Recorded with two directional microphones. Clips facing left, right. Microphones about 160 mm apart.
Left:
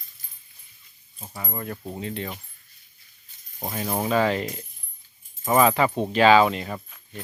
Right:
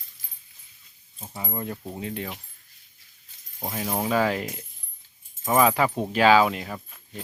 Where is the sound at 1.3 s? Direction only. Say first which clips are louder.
Right 1 dB; 20° right (ahead or behind).